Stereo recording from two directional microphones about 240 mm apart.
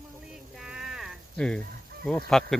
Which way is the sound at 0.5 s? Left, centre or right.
Centre.